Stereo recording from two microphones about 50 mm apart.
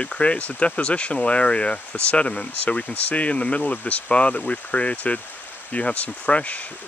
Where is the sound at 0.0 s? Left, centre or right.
Left.